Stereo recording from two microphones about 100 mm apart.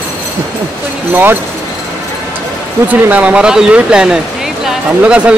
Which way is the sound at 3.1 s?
15° right (ahead or behind).